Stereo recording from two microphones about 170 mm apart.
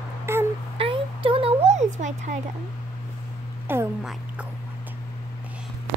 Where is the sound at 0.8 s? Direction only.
30° right (ahead or behind).